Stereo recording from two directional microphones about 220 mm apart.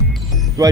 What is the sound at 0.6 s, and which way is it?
Speech, 15° right (ahead or behind).